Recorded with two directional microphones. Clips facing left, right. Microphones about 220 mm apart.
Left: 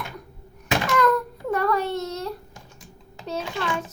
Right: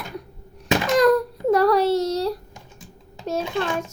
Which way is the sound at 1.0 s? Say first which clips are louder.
Right 6 dB; 35° right (ahead or behind).